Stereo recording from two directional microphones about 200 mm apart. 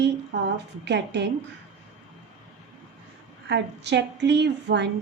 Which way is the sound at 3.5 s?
60° right (ahead or behind).